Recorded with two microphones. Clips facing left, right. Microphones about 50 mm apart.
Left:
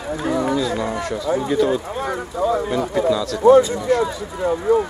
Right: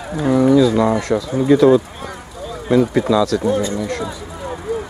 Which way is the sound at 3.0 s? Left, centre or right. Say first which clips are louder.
Left 2 dB; centre.